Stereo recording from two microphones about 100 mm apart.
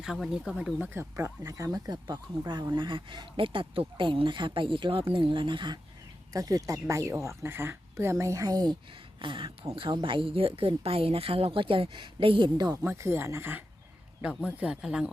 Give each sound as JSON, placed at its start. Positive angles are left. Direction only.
{"t": 0.0, "sound": "speech", "side_deg": -5}
{"t": 0.8, "sound": "speech", "side_deg": -25}
{"t": 2.4, "sound": "speech", "side_deg": -45}
{"t": 6.3, "sound": "speech", "side_deg": -35}
{"t": 9.1, "sound": "speech", "side_deg": -55}
{"t": 12.5, "sound": "speech", "side_deg": -40}
{"t": 12.8, "sound": "speech", "side_deg": -25}
{"t": 14.6, "sound": "speech", "side_deg": -5}